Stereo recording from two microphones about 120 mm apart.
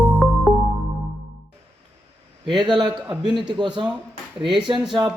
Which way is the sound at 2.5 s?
40° right (ahead or behind).